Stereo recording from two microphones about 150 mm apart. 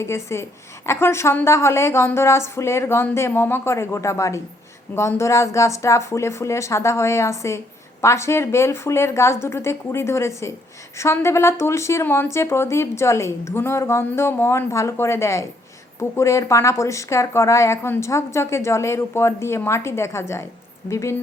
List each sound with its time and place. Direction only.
0.0 s speech: 15° left (ahead or behind)